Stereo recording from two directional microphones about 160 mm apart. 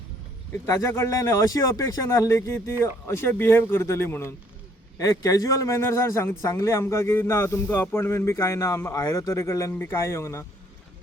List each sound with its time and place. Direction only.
0.5 s a man's voice: 15° left (ahead or behind)